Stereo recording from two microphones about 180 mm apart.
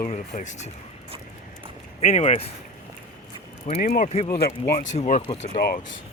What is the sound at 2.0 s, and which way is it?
Speech, 40° left (ahead or behind).